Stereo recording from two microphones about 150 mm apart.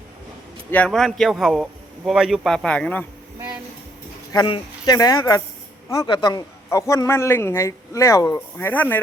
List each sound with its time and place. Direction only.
0.7 s speech: 5° left (ahead or behind)
4.3 s a man's voice: 30° left (ahead or behind)
8.5 s speech: 10° left (ahead or behind)